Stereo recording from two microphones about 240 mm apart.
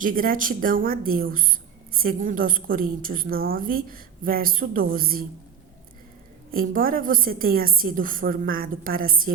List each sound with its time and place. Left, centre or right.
0.0 s speech: right
6.5 s speech: right